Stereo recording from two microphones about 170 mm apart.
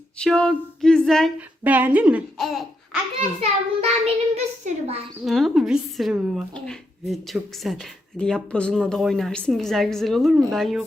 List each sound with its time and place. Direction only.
0.2 s speech: 5° left (ahead or behind)
1.4 s speech: 10° right (ahead or behind)
3.8 s a child's voice: 35° right (ahead or behind)
5.2 s speech: centre (ahead or behind)